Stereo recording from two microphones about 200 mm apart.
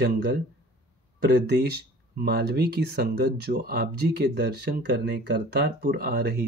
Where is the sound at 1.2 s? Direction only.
55° right (ahead or behind).